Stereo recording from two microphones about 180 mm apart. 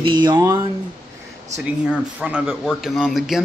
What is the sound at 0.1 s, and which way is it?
Speech, 25° right (ahead or behind).